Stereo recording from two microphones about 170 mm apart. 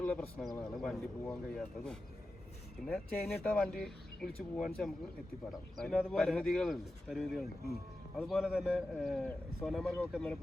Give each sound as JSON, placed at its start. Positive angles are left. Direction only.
{"t": 0.0, "sound": "speech", "side_deg": 10}